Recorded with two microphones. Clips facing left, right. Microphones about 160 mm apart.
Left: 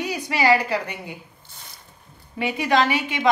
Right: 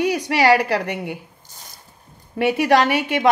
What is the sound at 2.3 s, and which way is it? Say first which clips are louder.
Speech: right 5 dB; 70° right (ahead or behind).